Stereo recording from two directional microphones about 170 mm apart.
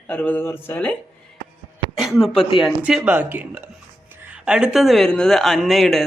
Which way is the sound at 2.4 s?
30° left (ahead or behind).